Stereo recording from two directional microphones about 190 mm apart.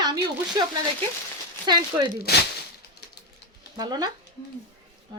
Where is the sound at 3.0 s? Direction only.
60° left (ahead or behind).